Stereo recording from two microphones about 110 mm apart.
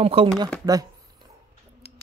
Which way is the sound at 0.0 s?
60° right (ahead or behind).